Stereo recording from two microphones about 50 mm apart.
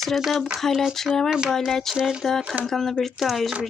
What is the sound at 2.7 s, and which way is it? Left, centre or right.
Speech, centre.